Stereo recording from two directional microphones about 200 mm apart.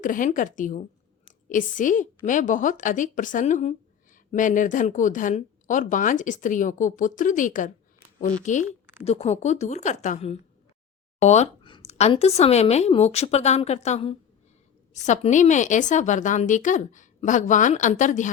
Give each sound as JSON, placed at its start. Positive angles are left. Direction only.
{"t": 0.0, "sound": "a woman's voice", "side_deg": 40}
{"t": 11.2, "sound": "a sound", "side_deg": 35}
{"t": 11.9, "sound": "a woman's voice", "side_deg": 35}